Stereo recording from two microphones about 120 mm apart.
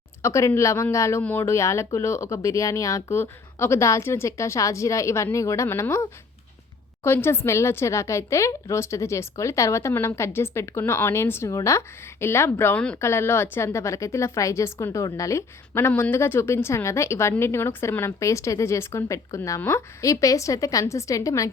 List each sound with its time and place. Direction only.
0.2 s a woman's voice: 25° left (ahead or behind)